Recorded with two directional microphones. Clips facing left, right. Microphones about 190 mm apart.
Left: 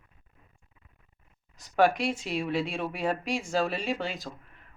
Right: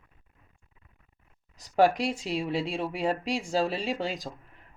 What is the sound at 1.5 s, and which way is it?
Speech, 35° right (ahead or behind).